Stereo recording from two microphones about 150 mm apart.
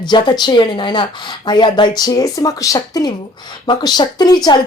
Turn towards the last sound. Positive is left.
turn(degrees=30)  # may be behind; listen again after turning